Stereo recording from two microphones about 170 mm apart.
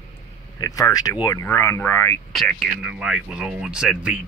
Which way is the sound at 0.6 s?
20° left (ahead or behind).